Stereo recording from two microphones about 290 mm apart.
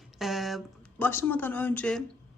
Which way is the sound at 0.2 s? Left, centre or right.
Centre.